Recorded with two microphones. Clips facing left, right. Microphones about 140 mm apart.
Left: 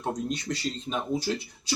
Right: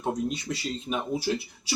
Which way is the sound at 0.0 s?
5° right (ahead or behind).